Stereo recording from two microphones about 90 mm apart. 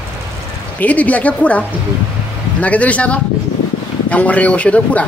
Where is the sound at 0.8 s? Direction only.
15° left (ahead or behind).